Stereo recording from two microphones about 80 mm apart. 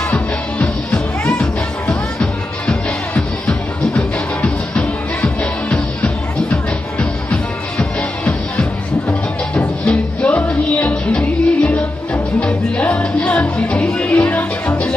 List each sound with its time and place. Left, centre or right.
0.1 s music: centre
9.5 s music: centre